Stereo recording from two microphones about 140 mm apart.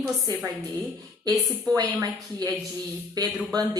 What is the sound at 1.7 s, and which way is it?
A woman's voice, 25° right (ahead or behind).